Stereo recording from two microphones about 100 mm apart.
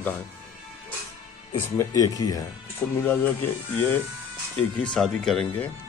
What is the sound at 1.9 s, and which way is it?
Speech, 35° left (ahead or behind).